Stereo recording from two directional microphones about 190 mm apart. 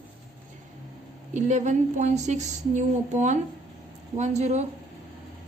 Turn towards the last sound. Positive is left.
turn(degrees=-35)  # may be behind; listen again after turning